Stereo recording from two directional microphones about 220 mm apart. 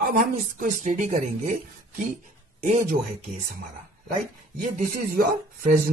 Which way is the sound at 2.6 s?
35° right (ahead or behind).